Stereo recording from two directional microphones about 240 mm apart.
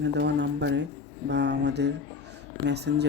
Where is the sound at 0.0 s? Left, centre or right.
Right.